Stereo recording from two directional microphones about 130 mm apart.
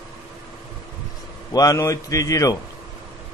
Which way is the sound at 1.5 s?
25° left (ahead or behind).